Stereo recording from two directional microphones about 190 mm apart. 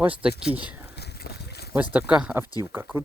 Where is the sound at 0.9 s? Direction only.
55° left (ahead or behind).